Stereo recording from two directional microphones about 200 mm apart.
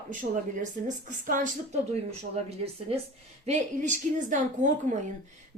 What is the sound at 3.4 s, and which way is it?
A woman's voice, 40° right (ahead or behind).